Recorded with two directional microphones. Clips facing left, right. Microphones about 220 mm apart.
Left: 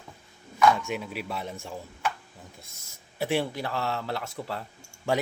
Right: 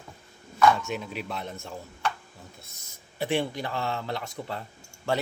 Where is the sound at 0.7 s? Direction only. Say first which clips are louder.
Even; 10° left (ahead or behind).